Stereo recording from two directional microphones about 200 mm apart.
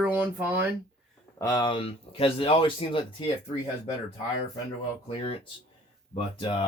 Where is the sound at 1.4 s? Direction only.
20° left (ahead or behind).